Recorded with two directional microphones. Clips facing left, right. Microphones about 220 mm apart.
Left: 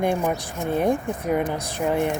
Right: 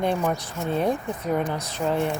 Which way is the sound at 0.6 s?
15° left (ahead or behind).